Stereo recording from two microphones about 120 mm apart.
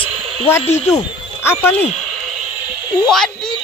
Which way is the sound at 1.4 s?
20° left (ahead or behind).